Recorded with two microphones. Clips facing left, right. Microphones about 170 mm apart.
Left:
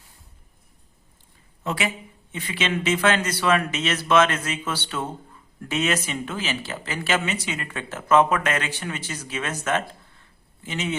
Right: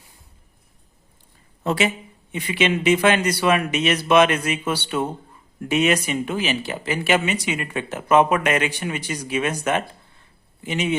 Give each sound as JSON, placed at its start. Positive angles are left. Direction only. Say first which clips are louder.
{"t": 1.6, "sound": "a woman's voice", "louder": "right 6 dB", "side_deg": -30}
{"t": 2.3, "sound": "a man's voice", "louder": "right 5 dB", "side_deg": -15}